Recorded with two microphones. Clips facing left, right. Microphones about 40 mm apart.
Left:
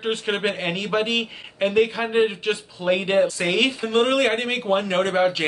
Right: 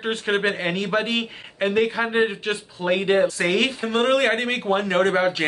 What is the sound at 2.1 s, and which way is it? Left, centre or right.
Speech, centre.